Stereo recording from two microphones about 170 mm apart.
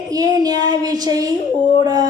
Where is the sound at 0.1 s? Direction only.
20° right (ahead or behind).